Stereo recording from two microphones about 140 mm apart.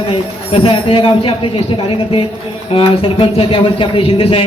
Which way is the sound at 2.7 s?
40° left (ahead or behind).